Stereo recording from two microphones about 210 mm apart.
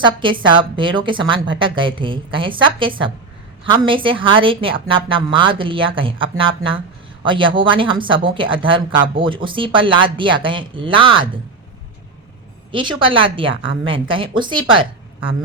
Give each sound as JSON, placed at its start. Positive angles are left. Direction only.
{"t": 0.0, "sound": "speech", "side_deg": -25}
{"t": 12.7, "sound": "speech", "side_deg": -25}